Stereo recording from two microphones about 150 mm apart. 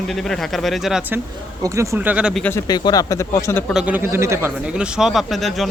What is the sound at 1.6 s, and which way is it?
Speech, 20° right (ahead or behind).